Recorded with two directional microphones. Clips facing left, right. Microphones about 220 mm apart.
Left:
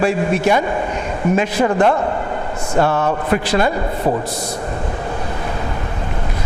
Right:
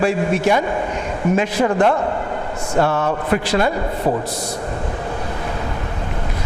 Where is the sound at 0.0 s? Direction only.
20° left (ahead or behind).